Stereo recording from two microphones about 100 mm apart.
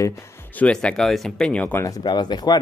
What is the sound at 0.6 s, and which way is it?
Speech, 10° left (ahead or behind).